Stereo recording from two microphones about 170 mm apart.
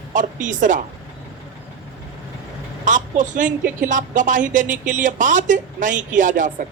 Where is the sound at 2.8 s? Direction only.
50° right (ahead or behind).